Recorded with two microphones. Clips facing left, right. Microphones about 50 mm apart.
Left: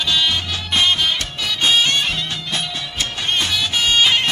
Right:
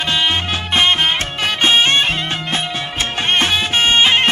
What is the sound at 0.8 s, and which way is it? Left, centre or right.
Music, right.